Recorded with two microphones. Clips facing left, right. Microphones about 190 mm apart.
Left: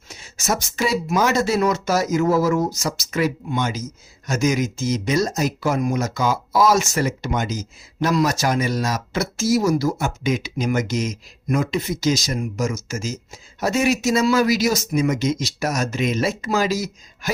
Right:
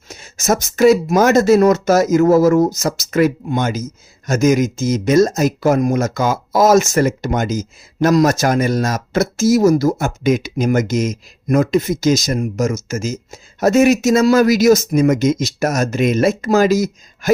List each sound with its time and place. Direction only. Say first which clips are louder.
0.1 s speech: right 6 dB; 45° right (ahead or behind)